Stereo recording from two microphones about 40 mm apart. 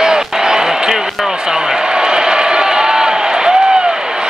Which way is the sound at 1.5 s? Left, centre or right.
Centre.